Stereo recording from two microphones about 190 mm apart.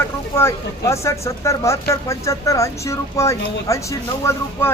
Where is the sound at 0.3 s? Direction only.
15° left (ahead or behind).